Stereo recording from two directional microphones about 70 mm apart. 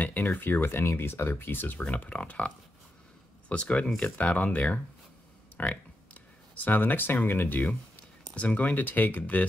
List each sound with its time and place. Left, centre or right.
0.0 s speech: left
1.9 s speech: centre